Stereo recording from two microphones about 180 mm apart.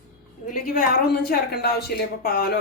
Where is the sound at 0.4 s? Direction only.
45° left (ahead or behind).